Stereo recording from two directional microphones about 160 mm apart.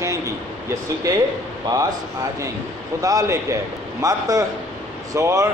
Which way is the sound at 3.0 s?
20° right (ahead or behind).